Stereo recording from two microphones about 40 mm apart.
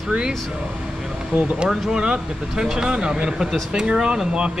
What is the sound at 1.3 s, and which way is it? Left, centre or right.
Speech, right.